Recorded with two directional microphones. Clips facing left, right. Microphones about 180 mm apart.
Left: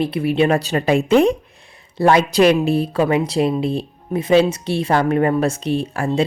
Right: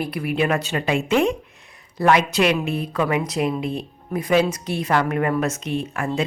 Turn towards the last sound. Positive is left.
turn(degrees=30)  # may be behind; listen again after turning